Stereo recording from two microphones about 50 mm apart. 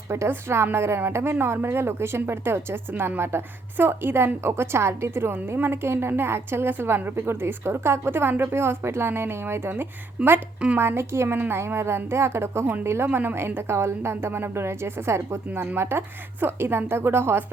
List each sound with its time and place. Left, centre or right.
0.3 s a woman's voice: right
10.2 s speech: centre
10.8 s a woman's voice: right
13.1 s a woman's voice: right